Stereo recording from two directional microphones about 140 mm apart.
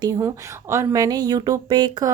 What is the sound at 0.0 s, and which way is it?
Speech, 20° right (ahead or behind).